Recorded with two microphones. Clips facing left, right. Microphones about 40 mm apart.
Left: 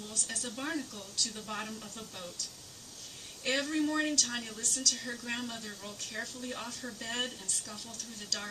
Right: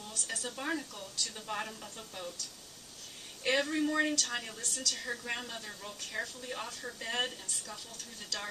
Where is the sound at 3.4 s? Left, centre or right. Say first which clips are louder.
Right 1 dB; centre.